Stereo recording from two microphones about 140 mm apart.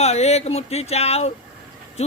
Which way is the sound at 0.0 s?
50° left (ahead or behind).